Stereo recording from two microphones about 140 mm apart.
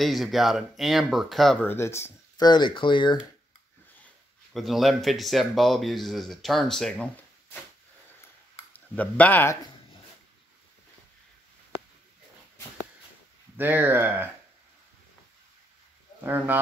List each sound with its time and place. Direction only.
0.0 s speech: centre (ahead or behind)
1.7 s speech: 20° left (ahead or behind)
2.4 s speech: 30° left (ahead or behind)
4.6 s speech: centre (ahead or behind)
8.7 s speech: 10° left (ahead or behind)
13.6 s speech: 15° right (ahead or behind)
16.3 s speech: 15° right (ahead or behind)